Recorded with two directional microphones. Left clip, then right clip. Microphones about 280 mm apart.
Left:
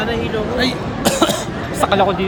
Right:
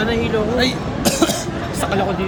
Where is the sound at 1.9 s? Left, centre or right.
Centre.